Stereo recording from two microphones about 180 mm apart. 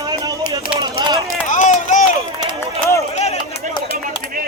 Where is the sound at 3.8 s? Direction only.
30° left (ahead or behind).